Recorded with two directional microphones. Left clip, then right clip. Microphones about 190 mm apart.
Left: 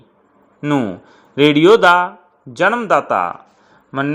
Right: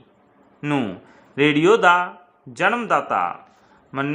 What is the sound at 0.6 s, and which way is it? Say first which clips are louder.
A man's voice: left 5 dB; 20° left (ahead or behind).